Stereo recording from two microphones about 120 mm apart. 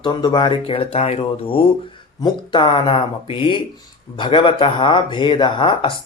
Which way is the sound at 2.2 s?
40° left (ahead or behind).